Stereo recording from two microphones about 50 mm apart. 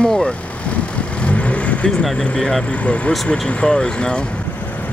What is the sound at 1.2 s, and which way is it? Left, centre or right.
Vehicle, left.